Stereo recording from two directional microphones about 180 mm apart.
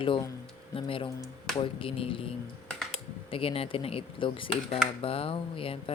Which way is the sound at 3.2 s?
30° left (ahead or behind).